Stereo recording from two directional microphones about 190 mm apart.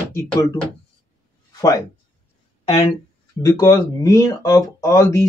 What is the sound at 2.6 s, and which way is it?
Speech, 35° left (ahead or behind).